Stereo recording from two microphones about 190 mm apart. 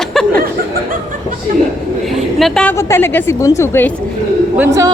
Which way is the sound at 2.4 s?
5° left (ahead or behind).